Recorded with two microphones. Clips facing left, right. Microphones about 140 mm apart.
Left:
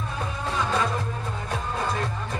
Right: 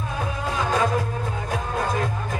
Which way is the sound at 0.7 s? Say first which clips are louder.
Right 7 dB; 45° right (ahead or behind).